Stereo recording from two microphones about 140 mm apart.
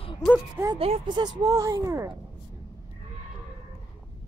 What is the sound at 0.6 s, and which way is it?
Speech, 15° right (ahead or behind).